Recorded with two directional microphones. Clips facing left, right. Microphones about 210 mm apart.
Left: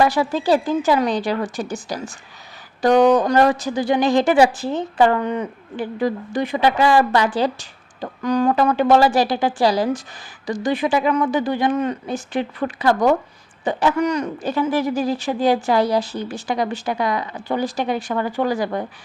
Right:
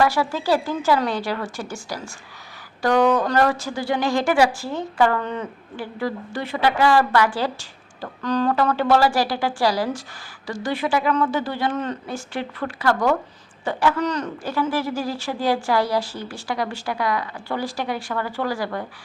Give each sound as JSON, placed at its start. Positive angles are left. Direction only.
{"t": 0.0, "sound": "a woman's voice", "side_deg": 20}